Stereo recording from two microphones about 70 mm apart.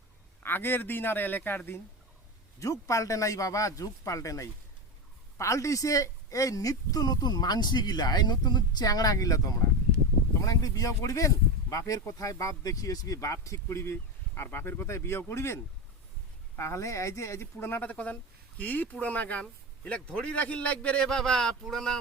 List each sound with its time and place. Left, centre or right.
0.4 s speech: left
2.6 s speech: left; by 21.9 s centre